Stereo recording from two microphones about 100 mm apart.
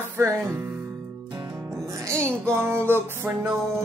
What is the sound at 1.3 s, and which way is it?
Music, 50° right (ahead or behind).